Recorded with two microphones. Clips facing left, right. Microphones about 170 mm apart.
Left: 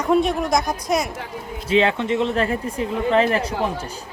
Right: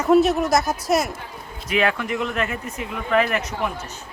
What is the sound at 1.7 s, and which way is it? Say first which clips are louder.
Speech: left 4 dB; 25° left (ahead or behind).